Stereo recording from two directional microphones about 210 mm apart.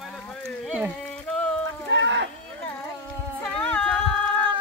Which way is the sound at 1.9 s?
60° right (ahead or behind).